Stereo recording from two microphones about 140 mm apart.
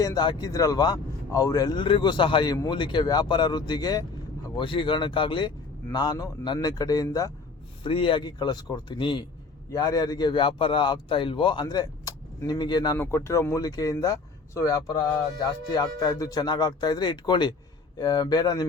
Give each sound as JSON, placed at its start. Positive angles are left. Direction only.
{"t": 0.0, "sound": "a man's voice", "side_deg": 30}
{"t": 7.9, "sound": "a man's voice", "side_deg": 35}
{"t": 13.0, "sound": "speech", "side_deg": 20}